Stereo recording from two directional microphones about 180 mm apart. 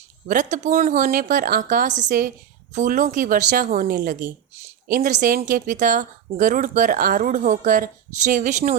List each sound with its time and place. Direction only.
0.3 s speech: 45° right (ahead or behind)